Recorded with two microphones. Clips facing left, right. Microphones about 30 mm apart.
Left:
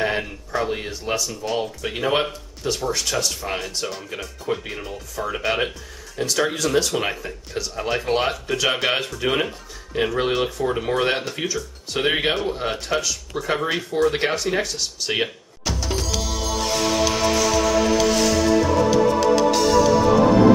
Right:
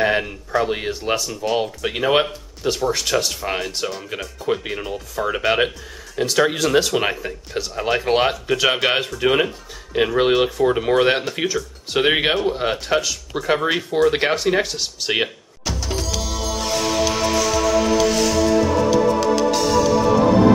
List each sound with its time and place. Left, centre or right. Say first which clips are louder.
0.0 s speech: right 4 dB; centre
0.7 s speech: right 3 dB; right
1.3 s speech: right 4 dB; centre
1.9 s speech: right 4 dB; centre
8.8 s speech: right 3 dB; centre
13.4 s speech: right 4 dB; centre
15.2 s music: even; centre